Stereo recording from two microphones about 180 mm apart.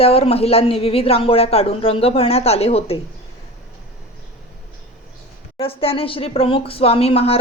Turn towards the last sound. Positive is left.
turn(degrees=35)  # may be behind; listen again after turning